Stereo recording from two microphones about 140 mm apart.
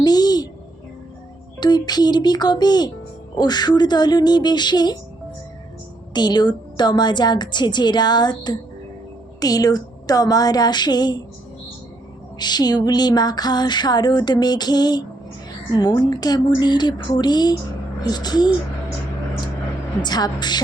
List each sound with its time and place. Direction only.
0.0 s music: 30° left (ahead or behind)
1.5 s a woman's voice: 30° left (ahead or behind)
6.1 s a woman's voice: 30° left (ahead or behind)
9.4 s music: 25° left (ahead or behind)
12.4 s music: 30° left (ahead or behind)
20.0 s a woman's voice: 30° left (ahead or behind)